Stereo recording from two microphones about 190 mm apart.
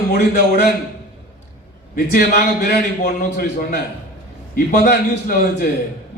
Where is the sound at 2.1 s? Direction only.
50° left (ahead or behind).